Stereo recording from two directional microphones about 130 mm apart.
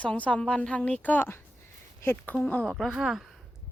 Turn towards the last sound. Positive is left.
turn(degrees=0)  # may be behind; listen again after turning